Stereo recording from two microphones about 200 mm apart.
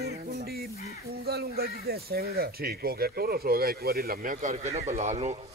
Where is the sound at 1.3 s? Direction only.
50° right (ahead or behind); by 5.4 s 35° right (ahead or behind).